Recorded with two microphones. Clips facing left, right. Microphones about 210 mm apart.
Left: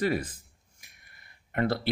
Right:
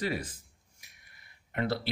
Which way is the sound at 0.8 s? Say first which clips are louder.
Left 3 dB; 50° left (ahead or behind).